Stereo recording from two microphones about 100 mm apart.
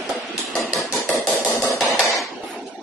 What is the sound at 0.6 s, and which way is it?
Hammer, centre (ahead or behind).